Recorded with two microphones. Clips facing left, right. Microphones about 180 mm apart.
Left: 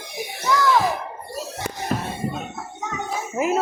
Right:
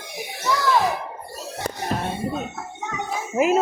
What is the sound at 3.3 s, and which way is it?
Speech, 15° right (ahead or behind).